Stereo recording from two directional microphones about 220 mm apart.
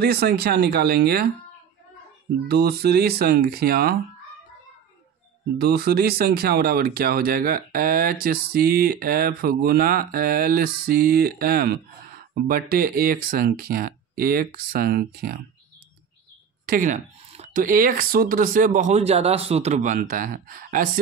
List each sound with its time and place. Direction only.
0.0 s speech: 45° right (ahead or behind)
2.4 s speech: 45° right (ahead or behind)
5.6 s speech: 45° right (ahead or behind)
16.6 s speech: 40° right (ahead or behind)